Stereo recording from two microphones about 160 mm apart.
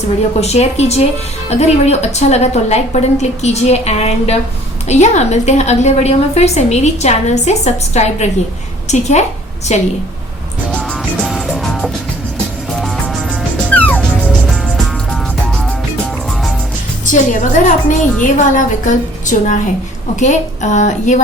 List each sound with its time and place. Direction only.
0.3 s a woman's voice: 40° left (ahead or behind)
10.7 s music: 5° left (ahead or behind)
11.2 s music: 5° right (ahead or behind)
14.3 s music: 5° right (ahead or behind)
17.1 s a woman's voice: 50° left (ahead or behind)